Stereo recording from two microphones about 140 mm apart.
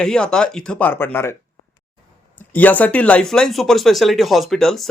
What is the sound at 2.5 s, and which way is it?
Speech, 10° left (ahead or behind).